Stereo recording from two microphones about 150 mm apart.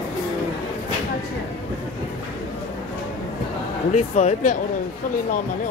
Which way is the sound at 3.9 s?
50° left (ahead or behind).